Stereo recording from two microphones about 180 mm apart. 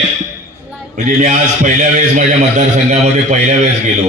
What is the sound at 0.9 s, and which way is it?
A man's voice, 45° right (ahead or behind).